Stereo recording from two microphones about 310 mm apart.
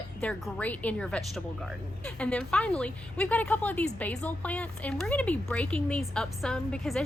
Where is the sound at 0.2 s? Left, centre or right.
Centre.